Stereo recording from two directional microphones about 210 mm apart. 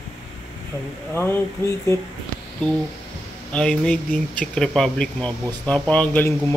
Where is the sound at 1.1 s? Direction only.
10° left (ahead or behind).